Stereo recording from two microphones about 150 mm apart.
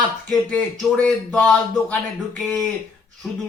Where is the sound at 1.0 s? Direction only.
5° left (ahead or behind).